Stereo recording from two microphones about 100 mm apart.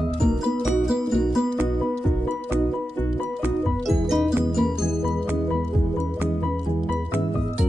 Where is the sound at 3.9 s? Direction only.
Centre (ahead or behind).